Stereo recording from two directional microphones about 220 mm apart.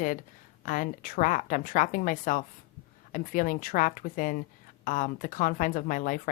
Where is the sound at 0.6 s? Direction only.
35° left (ahead or behind).